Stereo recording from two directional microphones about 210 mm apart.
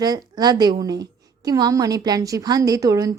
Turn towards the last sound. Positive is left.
turn(degrees=-15)  # may be behind; listen again after turning